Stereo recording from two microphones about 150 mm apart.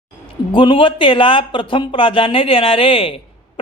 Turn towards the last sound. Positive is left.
turn(degrees=35)  # may be behind; listen again after turning